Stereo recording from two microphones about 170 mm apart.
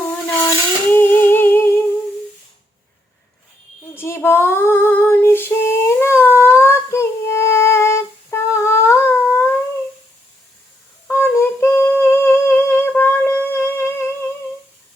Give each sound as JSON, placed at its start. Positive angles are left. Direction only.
{"t": 0.4, "sound": "humming", "side_deg": 10}
{"t": 3.9, "sound": "female singing", "side_deg": 15}
{"t": 6.6, "sound": "music", "side_deg": 15}
{"t": 11.1, "sound": "humming", "side_deg": 15}